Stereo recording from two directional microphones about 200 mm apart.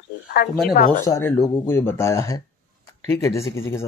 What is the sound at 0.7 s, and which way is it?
Speech, 40° left (ahead or behind).